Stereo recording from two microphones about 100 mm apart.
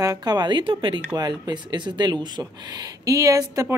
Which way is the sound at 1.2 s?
45° right (ahead or behind).